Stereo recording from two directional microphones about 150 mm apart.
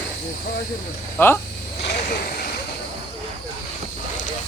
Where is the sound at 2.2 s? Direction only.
90° left.